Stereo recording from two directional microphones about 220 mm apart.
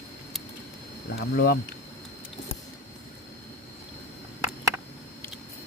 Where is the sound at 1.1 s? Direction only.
45° left (ahead or behind).